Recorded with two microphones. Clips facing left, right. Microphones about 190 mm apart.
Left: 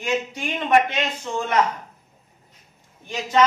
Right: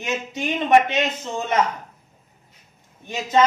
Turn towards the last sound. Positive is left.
turn(degrees=-20)  # may be behind; listen again after turning